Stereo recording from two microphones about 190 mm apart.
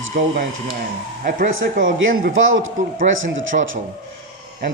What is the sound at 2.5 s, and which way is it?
Speech, 90° right.